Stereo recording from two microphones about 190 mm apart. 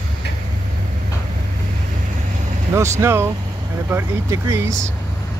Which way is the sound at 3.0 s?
15° right (ahead or behind).